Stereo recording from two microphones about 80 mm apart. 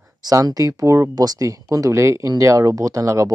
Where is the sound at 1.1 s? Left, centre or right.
Right.